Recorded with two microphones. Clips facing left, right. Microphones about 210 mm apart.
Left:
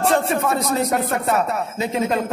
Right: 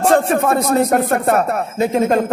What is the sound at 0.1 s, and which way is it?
Speech, 50° right (ahead or behind).